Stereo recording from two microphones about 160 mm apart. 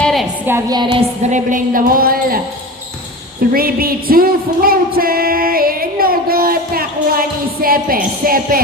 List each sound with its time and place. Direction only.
0.0 s a sound: centre (ahead or behind)
0.7 s a woman's voice: 30° right (ahead or behind)
1.3 s music: 55° right (ahead or behind)
3.5 s music: 65° right (ahead or behind)